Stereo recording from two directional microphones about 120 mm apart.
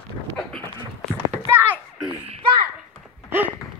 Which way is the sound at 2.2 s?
50° right (ahead or behind).